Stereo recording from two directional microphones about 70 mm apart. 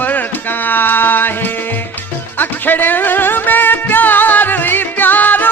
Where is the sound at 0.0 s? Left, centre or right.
Left.